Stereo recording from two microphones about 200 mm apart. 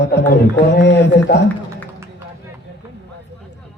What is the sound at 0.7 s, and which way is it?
Speech, 60° left (ahead or behind).